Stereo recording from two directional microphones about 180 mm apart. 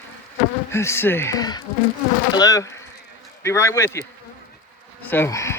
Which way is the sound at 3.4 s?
15° left (ahead or behind).